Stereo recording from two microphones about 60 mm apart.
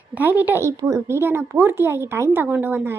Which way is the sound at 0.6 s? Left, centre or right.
Right.